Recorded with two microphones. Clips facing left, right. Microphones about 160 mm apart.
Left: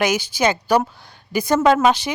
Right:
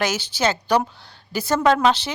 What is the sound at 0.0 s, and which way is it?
A woman's voice, 10° left (ahead or behind).